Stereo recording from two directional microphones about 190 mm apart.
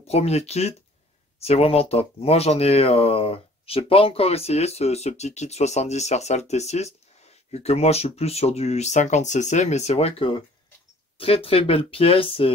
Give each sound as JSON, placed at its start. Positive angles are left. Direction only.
{"t": 0.0, "sound": "speech", "side_deg": 35}